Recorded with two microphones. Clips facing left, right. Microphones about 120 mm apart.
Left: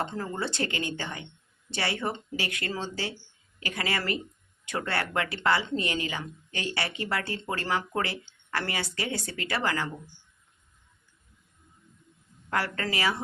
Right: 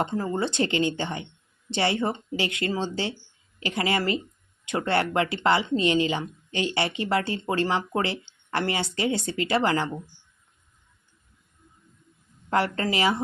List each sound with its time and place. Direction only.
0.0 s speech: 15° right (ahead or behind)
12.5 s speech: 25° right (ahead or behind)